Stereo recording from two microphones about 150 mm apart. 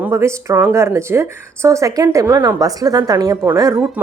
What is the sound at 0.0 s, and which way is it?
Speech, 20° right (ahead or behind).